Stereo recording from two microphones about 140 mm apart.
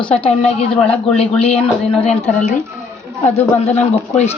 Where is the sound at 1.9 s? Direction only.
45° left (ahead or behind).